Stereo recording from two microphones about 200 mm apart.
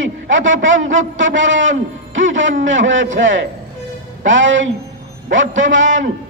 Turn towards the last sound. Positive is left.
turn(degrees=-70)  # may be behind; listen again after turning